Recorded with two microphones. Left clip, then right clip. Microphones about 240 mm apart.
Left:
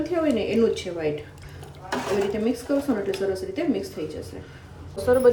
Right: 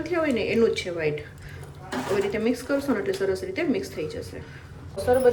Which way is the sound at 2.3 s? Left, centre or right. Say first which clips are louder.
Even; centre.